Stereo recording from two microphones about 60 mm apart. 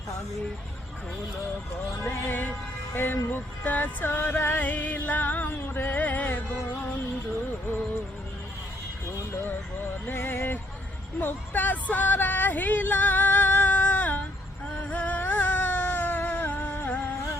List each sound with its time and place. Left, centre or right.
2.0 s music: left
10.1 s music: left
11.2 s speech: left
14.8 s a sound: left